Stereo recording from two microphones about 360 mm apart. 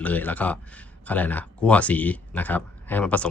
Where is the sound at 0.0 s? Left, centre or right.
Centre.